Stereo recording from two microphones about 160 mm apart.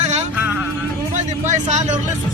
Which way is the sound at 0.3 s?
10° right (ahead or behind).